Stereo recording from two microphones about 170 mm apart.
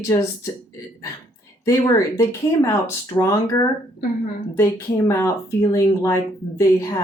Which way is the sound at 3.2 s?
20° left (ahead or behind).